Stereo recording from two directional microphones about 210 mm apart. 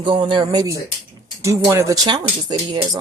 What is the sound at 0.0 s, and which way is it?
Speech, 25° right (ahead or behind).